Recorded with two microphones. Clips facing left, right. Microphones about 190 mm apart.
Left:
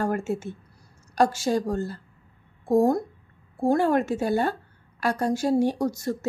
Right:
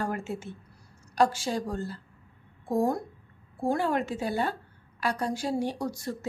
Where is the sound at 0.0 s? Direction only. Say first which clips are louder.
Left 6 dB; 45° left (ahead or behind).